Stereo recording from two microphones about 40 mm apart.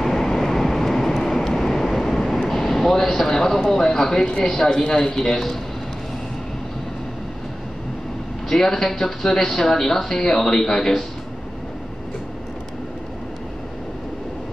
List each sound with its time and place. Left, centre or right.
0.0 s vehicle: centre
2.0 s speech: centre
8.5 s speech: centre